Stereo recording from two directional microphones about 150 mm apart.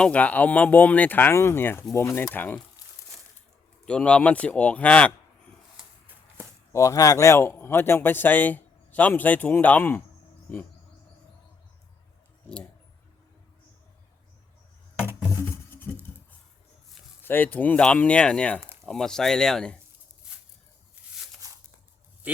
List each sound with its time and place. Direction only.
0.0 s speech: 10° left (ahead or behind)
2.8 s crumpling: 25° left (ahead or behind)
3.8 s speech: 5° left (ahead or behind)
6.7 s speech: 20° left (ahead or behind)
14.9 s a sound: 5° right (ahead or behind)
15.3 s music: 15° left (ahead or behind)
17.2 s speech: 15° left (ahead or behind)